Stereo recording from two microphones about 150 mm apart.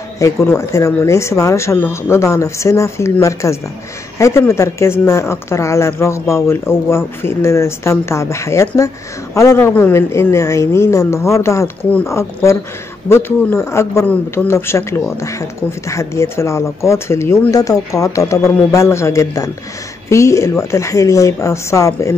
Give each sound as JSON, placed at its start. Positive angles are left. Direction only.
{"t": 0.2, "sound": "speech", "side_deg": 20}